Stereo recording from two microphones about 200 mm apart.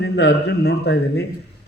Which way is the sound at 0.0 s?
55° left (ahead or behind).